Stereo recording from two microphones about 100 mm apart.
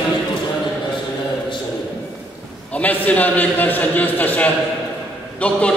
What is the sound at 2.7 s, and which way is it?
A man's voice, 15° left (ahead or behind).